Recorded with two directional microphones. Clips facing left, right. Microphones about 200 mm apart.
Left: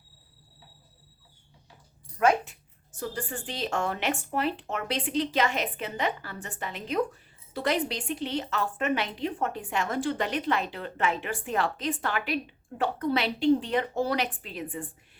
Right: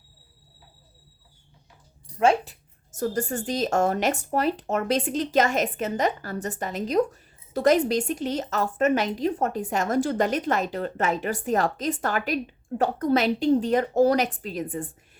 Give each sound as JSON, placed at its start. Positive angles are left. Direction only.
{"t": 2.1, "sound": "a woman's voice", "side_deg": -30}